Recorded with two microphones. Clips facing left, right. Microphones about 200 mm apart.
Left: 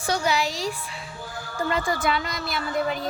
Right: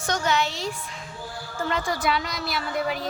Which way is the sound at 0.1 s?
10° left (ahead or behind).